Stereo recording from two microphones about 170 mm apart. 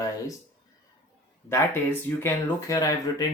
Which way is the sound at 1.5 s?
15° left (ahead or behind).